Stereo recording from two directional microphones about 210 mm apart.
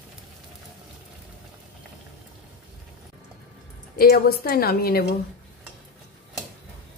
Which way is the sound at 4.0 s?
45° left (ahead or behind).